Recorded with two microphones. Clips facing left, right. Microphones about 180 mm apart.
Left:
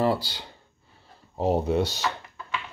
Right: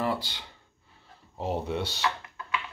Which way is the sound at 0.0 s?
35° left (ahead or behind).